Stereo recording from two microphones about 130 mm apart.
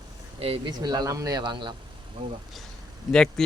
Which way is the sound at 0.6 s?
30° right (ahead or behind).